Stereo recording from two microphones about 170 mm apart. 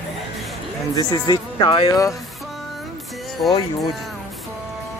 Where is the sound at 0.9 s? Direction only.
25° left (ahead or behind).